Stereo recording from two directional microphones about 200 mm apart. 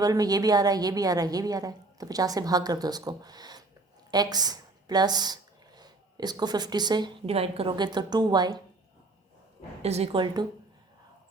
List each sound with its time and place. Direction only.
0.0 s a woman's voice: 20° right (ahead or behind)
9.8 s a woman's voice: 30° right (ahead or behind)